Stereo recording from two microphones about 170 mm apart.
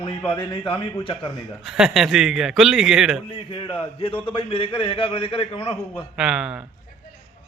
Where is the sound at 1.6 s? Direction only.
Centre (ahead or behind).